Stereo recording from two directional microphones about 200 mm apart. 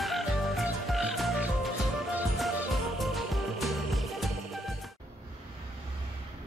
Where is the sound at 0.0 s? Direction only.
Centre (ahead or behind).